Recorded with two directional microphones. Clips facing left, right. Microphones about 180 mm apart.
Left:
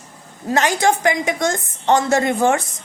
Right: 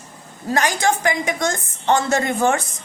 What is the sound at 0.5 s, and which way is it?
A woman's voice, 20° left (ahead or behind).